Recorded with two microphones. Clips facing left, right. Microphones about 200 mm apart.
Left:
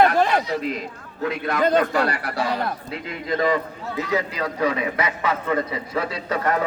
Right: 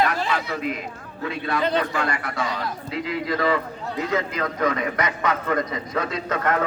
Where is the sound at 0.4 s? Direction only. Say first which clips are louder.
Left 2 dB; 35° left (ahead or behind).